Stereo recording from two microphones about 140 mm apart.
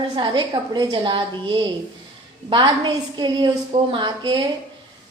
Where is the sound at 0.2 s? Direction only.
35° right (ahead or behind).